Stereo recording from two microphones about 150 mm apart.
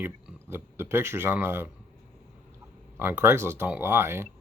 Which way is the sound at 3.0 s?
15° right (ahead or behind).